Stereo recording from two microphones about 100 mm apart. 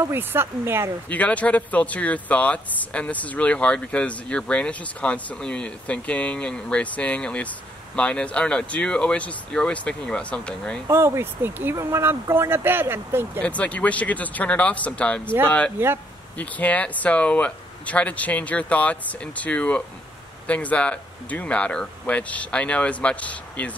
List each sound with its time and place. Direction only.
0.0 s speech: 20° right (ahead or behind)
1.0 s speech: 15° left (ahead or behind)
10.9 s speech: 25° right (ahead or behind)
13.4 s speech: 15° left (ahead or behind)